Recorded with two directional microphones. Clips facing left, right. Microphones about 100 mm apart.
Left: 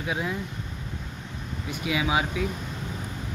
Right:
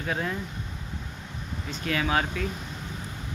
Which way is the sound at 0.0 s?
10° left (ahead or behind).